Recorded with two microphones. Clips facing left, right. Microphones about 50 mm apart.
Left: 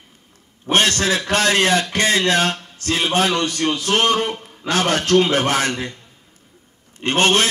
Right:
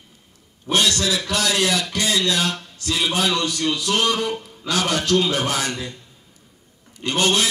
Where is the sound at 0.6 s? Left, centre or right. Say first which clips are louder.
Left 3 dB; left.